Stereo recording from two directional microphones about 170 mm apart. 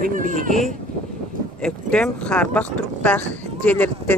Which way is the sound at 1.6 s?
5° left (ahead or behind).